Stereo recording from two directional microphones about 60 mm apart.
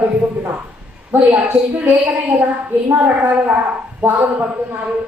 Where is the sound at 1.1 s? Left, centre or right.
Right.